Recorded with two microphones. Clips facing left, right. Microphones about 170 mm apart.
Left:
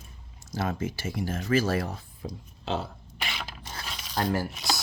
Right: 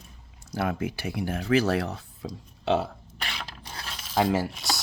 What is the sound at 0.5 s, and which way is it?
Speech, 60° right (ahead or behind).